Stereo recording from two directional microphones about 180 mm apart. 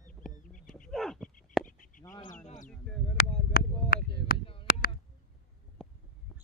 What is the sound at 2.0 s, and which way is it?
Bird, 20° left (ahead or behind).